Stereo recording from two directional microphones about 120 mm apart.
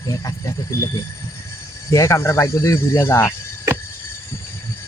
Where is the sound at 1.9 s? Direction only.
25° left (ahead or behind).